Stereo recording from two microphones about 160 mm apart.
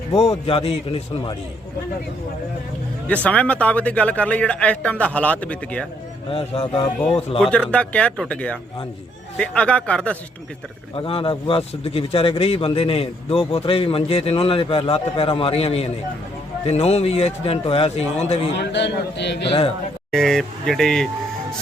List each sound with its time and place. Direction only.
0.3 s a man's voice: 35° left (ahead or behind)
3.2 s speech: 10° left (ahead or behind)
6.3 s a man's voice: 35° left (ahead or behind)
7.3 s speech: 5° left (ahead or behind)
10.9 s a man's voice: 35° left (ahead or behind)
18.5 s a man's voice: 90° left
20.1 s speech: centre (ahead or behind)